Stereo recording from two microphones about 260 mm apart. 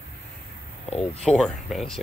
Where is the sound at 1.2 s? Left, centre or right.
Centre.